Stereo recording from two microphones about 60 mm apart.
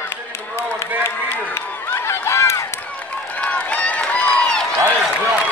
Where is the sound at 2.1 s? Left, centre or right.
Left.